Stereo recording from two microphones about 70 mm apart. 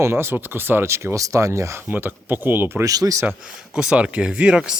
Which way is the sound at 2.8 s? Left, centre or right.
Right.